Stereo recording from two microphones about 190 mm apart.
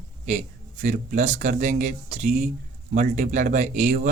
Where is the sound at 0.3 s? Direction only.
40° right (ahead or behind).